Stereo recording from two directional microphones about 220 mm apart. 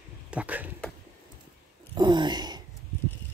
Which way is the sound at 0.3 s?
5° right (ahead or behind).